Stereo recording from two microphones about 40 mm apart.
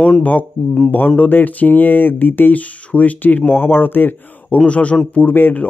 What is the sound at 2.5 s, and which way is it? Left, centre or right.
Speech, left.